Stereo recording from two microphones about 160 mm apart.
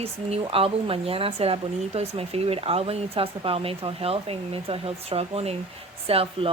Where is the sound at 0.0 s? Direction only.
40° right (ahead or behind).